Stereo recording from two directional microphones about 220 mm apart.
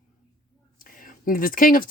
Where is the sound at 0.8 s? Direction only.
40° left (ahead or behind).